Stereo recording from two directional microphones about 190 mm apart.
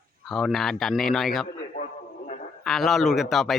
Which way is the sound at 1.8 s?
40° left (ahead or behind).